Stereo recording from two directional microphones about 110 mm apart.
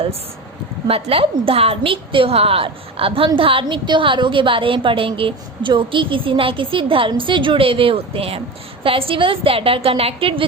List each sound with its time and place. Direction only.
0.9 s a woman's voice: 60° right (ahead or behind)